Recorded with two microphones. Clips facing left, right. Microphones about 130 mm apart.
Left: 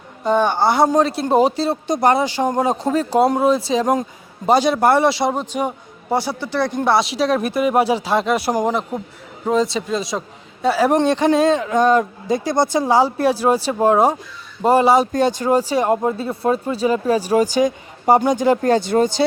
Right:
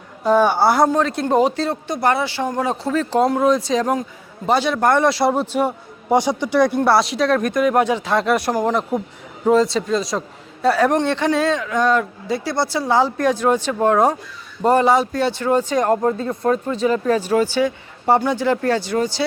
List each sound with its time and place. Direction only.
0.3 s speech: 5° right (ahead or behind)
1.3 s speech: 10° left (ahead or behind)
9.5 s speech: centre (ahead or behind); by 19.2 s 25° left (ahead or behind)